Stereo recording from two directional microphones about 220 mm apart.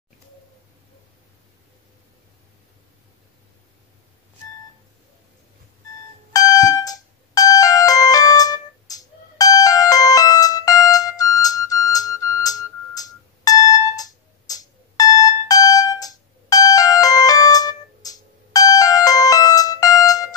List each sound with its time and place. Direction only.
6.3 s ringtone: 15° left (ahead or behind)
11.3 s music: 15° left (ahead or behind)